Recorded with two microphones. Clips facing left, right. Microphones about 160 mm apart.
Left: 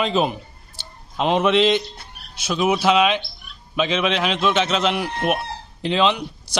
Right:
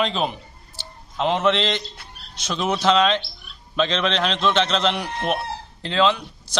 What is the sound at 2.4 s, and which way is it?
A man's voice, 10° left (ahead or behind).